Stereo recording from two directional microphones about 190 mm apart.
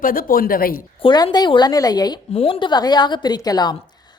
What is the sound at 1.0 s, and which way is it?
A woman's voice, 25° left (ahead or behind).